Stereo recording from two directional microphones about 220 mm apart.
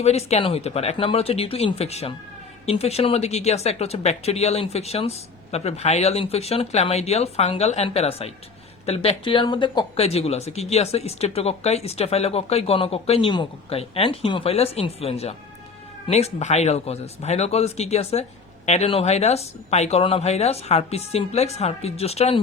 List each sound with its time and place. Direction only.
0.0 s speech: 30° left (ahead or behind)